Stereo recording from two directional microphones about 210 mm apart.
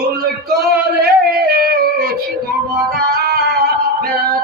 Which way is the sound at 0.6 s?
45° right (ahead or behind).